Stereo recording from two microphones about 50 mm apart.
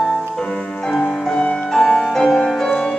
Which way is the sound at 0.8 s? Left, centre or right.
Centre.